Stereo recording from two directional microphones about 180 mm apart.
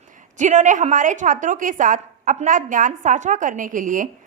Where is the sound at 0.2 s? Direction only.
45° right (ahead or behind).